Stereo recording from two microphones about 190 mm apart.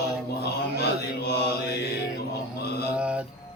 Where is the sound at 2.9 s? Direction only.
5° right (ahead or behind).